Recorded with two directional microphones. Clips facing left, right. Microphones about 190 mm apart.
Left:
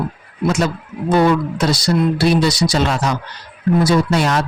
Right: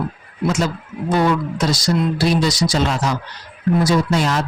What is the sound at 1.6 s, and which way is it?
Speech, 60° left (ahead or behind).